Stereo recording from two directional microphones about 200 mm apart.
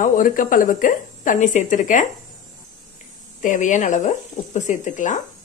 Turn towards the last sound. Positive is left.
turn(degrees=40)  # may be behind; listen again after turning